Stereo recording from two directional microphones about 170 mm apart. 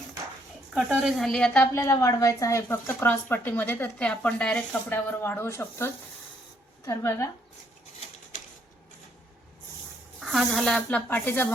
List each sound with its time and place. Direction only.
0.7 s speech: 5° right (ahead or behind)
1.7 s speech: 20° left (ahead or behind)
10.2 s speech: centre (ahead or behind)